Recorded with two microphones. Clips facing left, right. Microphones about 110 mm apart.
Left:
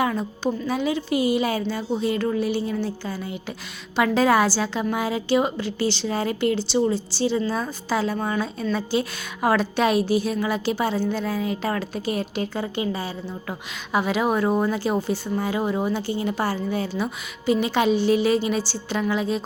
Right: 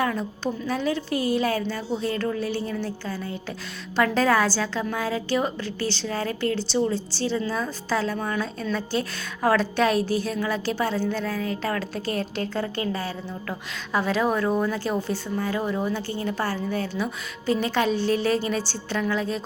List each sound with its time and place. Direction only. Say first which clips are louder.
0.0 s a woman's voice: left 2 dB; 10° left (ahead or behind)
14.9 s a woman's voice: left 3 dB; 5° left (ahead or behind)
15.4 s a woman's voice: left 1 dB; 15° left (ahead or behind)